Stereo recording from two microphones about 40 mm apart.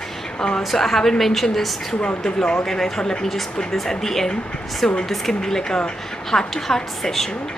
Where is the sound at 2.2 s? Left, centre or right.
Centre.